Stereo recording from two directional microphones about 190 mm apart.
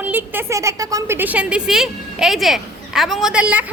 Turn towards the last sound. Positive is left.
turn(degrees=-5)  # may be behind; listen again after turning